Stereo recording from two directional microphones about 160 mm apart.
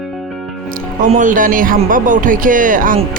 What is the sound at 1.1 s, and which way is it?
Speech, 55° right (ahead or behind).